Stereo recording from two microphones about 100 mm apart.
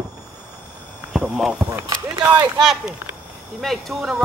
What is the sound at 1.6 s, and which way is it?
Speech, 20° right (ahead or behind).